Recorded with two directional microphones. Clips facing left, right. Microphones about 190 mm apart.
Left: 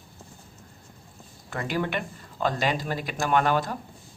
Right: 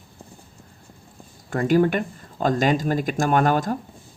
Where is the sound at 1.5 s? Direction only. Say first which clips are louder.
Right 10 dB; 45° right (ahead or behind).